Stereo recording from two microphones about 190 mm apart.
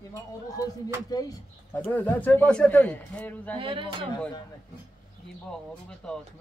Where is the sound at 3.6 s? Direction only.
25° right (ahead or behind).